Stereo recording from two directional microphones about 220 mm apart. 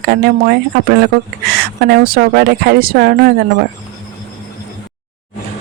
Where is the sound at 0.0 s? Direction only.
45° right (ahead or behind).